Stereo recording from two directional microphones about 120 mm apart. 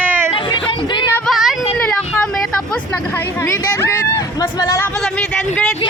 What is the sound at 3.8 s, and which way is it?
Speech, 25° left (ahead or behind).